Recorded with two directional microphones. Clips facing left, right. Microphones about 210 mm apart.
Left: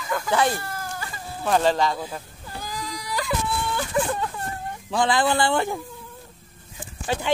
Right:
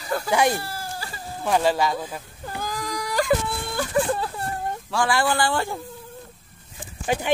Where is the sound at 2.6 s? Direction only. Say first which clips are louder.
Right 4 dB; 50° right (ahead or behind).